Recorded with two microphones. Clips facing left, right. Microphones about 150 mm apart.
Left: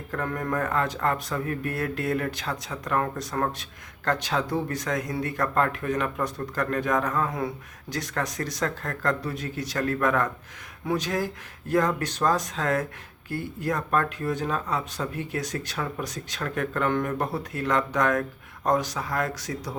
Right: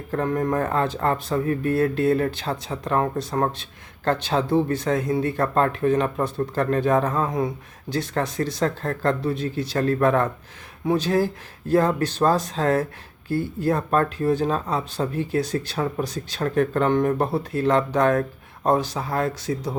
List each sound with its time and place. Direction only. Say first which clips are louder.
0.1 s speech: right 6 dB; 25° right (ahead or behind)